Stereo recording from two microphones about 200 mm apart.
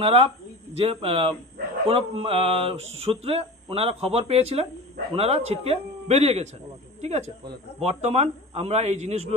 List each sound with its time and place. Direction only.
0.0 s speech: 30° right (ahead or behind)